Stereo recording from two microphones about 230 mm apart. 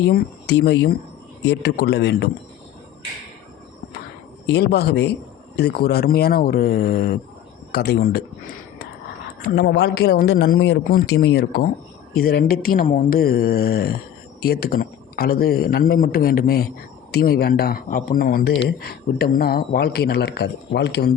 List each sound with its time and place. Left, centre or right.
0.0 s a man's voice: left
4.4 s a man's voice: left